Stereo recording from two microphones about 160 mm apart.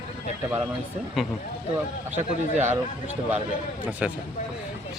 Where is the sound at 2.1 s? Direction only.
45° right (ahead or behind).